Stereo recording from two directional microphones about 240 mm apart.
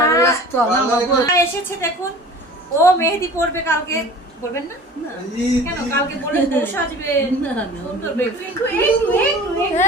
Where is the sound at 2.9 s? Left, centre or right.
Centre.